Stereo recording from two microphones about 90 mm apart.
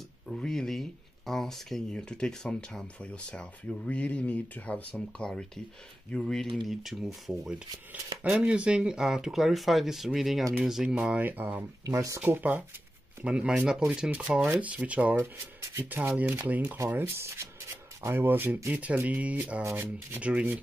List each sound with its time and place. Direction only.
0.3 s speech: 5° left (ahead or behind); by 12.6 s 20° right (ahead or behind)
13.2 s speech: 10° right (ahead or behind)
15.1 s speech: 35° right (ahead or behind)
16.2 s speech: 20° right (ahead or behind)
16.6 s speech: 30° right (ahead or behind); by 19.6 s 15° right (ahead or behind)
19.6 s speech: 25° right (ahead or behind)
20.2 s speech: 15° right (ahead or behind)